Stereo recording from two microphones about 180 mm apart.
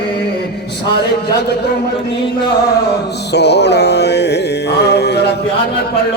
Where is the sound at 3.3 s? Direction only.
70° left (ahead or behind).